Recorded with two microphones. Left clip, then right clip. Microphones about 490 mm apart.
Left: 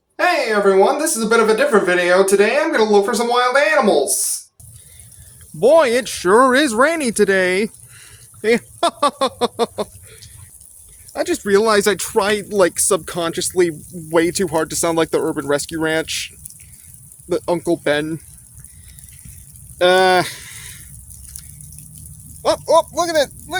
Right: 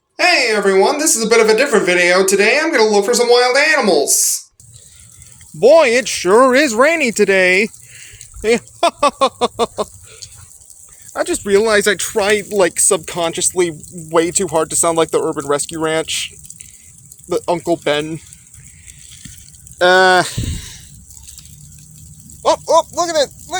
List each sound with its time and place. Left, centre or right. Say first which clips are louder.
0.2 s speech: right 3 dB; left
5.5 s speech: right 3 dB; left
19.8 s speech: right 3 dB; left
22.4 s a sound: right 2 dB; left